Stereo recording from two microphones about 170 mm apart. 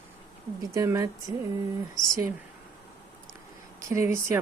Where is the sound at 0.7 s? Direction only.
15° right (ahead or behind).